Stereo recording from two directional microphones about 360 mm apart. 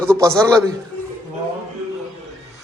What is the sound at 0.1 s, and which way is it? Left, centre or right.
Speech, centre.